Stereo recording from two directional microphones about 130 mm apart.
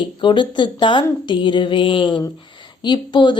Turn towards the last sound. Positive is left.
turn(degrees=35)  # may be behind; listen again after turning